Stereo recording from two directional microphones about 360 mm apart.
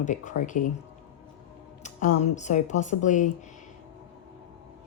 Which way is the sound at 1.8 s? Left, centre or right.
Left.